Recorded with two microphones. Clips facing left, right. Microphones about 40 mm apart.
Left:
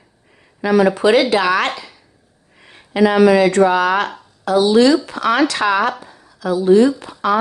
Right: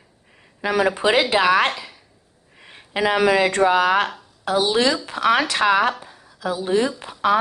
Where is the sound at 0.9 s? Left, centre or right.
Centre.